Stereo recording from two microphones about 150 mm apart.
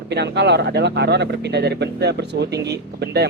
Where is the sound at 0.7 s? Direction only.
90° right.